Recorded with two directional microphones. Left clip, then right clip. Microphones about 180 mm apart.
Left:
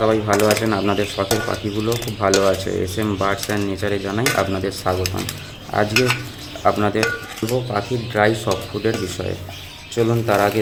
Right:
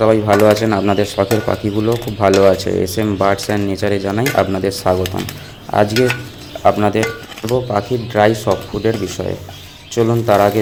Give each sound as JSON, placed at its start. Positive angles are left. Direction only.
{"t": 0.0, "sound": "speech", "side_deg": -25}
{"t": 6.7, "sound": "speech", "side_deg": -15}